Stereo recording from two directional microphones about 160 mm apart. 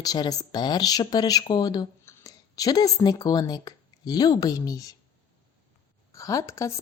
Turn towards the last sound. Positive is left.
turn(degrees=20)  # may be behind; listen again after turning